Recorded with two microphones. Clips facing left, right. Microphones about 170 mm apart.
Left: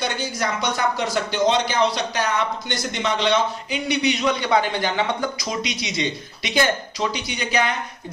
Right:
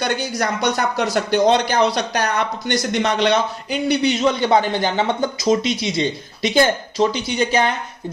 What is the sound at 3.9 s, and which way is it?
Speech, 25° right (ahead or behind).